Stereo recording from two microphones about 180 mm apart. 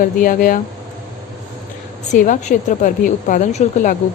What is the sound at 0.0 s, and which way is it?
Speech, 50° left (ahead or behind).